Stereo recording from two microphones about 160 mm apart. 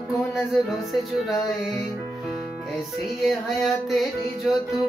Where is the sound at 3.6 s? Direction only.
Centre (ahead or behind).